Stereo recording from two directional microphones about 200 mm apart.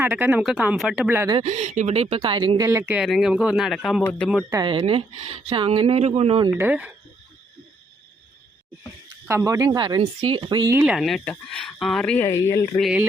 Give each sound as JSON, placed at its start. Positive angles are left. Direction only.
{"t": 0.0, "sound": "speech", "side_deg": -10}
{"t": 1.3, "sound": "speech", "side_deg": -30}
{"t": 2.6, "sound": "speech", "side_deg": -10}
{"t": 4.5, "sound": "speech", "side_deg": -25}
{"t": 6.6, "sound": "speech", "side_deg": -10}
{"t": 9.2, "sound": "speech", "side_deg": -15}
{"t": 10.8, "sound": "speech", "side_deg": 0}
{"t": 12.8, "sound": "speech", "side_deg": -5}